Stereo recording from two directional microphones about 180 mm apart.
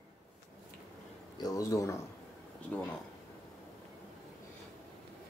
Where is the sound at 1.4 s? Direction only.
20° left (ahead or behind).